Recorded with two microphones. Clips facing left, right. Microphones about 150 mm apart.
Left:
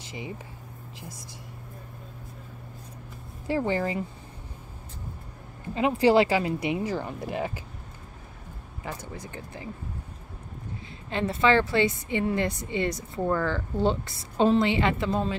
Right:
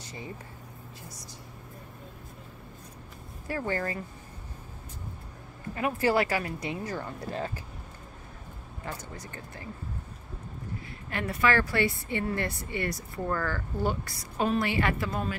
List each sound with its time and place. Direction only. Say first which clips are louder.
3.4 s a woman's voice: left 5 dB; 20° left (ahead or behind)
5.8 s speech: left 6 dB; 20° left (ahead or behind)
8.8 s speech: left 3 dB; 10° left (ahead or behind)
11.1 s a woman's voice: left 4 dB; 25° left (ahead or behind)